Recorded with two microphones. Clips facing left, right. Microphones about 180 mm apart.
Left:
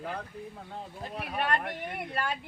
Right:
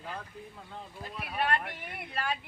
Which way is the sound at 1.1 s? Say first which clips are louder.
Left 1 dB; 40° left (ahead or behind).